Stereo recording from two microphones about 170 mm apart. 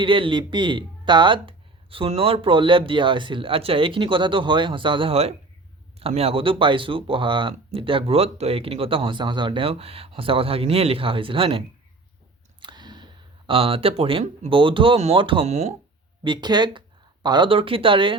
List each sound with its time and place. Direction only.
0.0 s speech: 30° right (ahead or behind)
12.6 s a sound: 25° right (ahead or behind)
13.5 s speech: 35° right (ahead or behind)
16.2 s speech: 25° right (ahead or behind)